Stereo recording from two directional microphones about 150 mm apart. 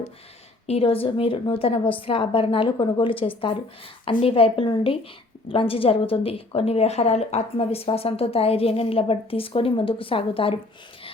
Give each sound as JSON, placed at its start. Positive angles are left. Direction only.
{"t": 0.7, "sound": "a woman's voice", "side_deg": 40}